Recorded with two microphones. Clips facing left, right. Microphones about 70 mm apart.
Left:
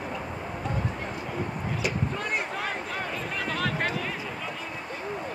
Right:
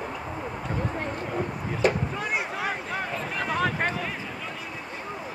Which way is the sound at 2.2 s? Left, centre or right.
Centre.